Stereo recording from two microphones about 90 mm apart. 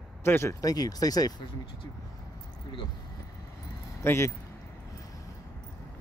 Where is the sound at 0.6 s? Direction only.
45° left (ahead or behind).